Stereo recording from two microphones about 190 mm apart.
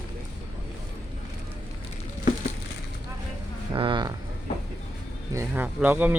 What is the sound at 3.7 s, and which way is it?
Speech, 25° right (ahead or behind).